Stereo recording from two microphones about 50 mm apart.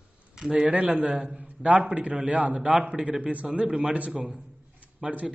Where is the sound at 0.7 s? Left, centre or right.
Right.